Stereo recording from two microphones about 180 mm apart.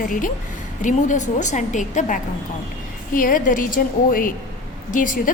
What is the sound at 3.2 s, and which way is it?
A woman's voice, 50° left (ahead or behind).